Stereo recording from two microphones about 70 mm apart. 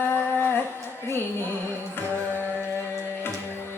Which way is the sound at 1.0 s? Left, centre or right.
Left.